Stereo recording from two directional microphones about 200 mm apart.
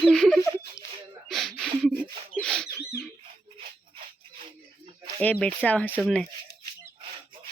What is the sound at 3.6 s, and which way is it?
Music, 30° right (ahead or behind).